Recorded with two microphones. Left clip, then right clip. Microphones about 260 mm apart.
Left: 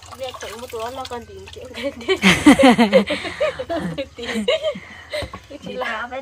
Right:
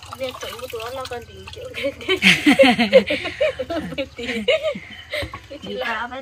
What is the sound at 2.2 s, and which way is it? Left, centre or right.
Speech, centre.